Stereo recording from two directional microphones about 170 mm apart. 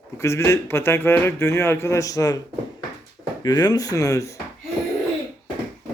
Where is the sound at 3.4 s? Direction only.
25° left (ahead or behind).